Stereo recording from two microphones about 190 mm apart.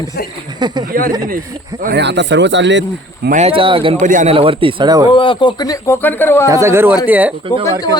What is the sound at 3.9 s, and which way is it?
Speech, 40° right (ahead or behind).